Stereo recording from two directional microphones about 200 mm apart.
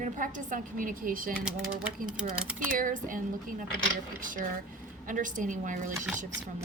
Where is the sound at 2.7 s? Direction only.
40° right (ahead or behind).